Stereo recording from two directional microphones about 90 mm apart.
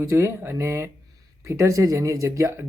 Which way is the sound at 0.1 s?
30° right (ahead or behind).